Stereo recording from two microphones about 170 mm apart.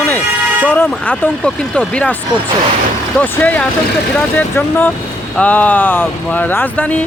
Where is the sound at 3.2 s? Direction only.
10° left (ahead or behind).